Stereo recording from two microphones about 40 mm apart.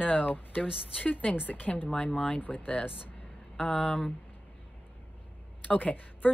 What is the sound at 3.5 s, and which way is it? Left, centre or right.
Speech, left.